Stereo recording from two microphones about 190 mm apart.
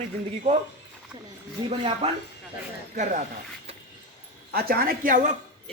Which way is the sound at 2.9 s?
40° right (ahead or behind).